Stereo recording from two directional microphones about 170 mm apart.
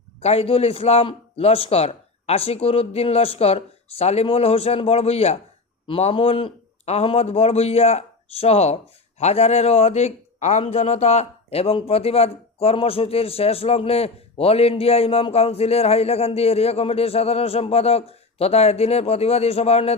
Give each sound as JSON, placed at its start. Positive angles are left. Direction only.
{"t": 0.2, "sound": "a man's voice", "side_deg": 35}